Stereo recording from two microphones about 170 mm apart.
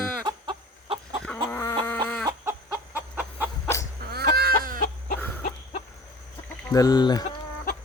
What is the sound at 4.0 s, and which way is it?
Chicken, 65° right (ahead or behind).